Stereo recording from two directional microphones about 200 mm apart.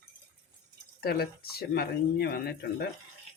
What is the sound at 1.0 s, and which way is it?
Speech, 50° left (ahead or behind).